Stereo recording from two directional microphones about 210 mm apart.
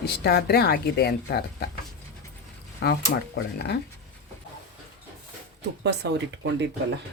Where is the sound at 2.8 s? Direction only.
50° left (ahead or behind).